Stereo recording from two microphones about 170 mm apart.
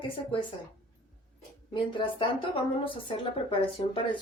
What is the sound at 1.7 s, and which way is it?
Speech, 30° left (ahead or behind).